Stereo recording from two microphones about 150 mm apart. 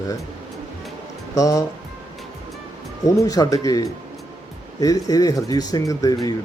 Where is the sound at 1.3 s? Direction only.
20° left (ahead or behind).